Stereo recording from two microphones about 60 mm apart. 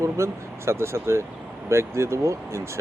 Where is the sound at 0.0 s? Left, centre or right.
Right.